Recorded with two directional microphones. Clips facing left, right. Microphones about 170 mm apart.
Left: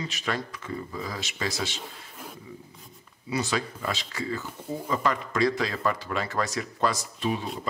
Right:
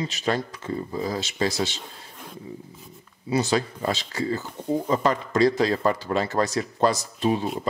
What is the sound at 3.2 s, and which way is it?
Speech, 30° right (ahead or behind).